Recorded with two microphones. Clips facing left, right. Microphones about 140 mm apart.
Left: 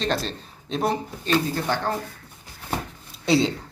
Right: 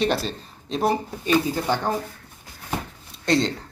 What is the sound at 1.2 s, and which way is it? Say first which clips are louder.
Speech: right 2 dB; 15° right (ahead or behind).